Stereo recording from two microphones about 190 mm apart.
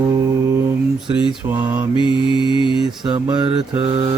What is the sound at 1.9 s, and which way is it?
Mantra, 25° left (ahead or behind).